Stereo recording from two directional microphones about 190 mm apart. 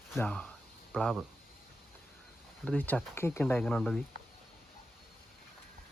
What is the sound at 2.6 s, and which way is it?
Speech, 5° left (ahead or behind).